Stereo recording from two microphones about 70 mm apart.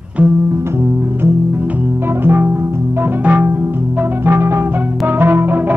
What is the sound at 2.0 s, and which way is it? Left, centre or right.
Music, right.